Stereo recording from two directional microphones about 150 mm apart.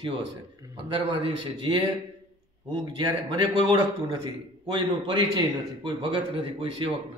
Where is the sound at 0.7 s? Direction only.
30° right (ahead or behind).